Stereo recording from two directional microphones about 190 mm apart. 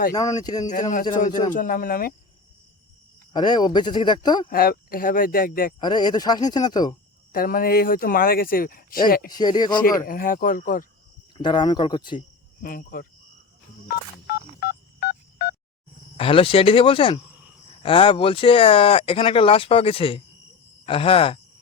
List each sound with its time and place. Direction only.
0.1 s speech: 20° left (ahead or behind)
0.7 s speech: 40° left (ahead or behind)
3.3 s speech: 20° left (ahead or behind)
4.4 s speech: 50° left (ahead or behind)
5.8 s speech: 20° left (ahead or behind)
7.3 s speech: 50° left (ahead or behind)
9.3 s speech: 20° left (ahead or behind)
10.0 s speech: 45° left (ahead or behind)
11.3 s speech: 25° left (ahead or behind)
12.6 s speech: 50° left (ahead or behind)
13.8 s telephone dialing: 55° left (ahead or behind)
16.1 s speech: 30° left (ahead or behind)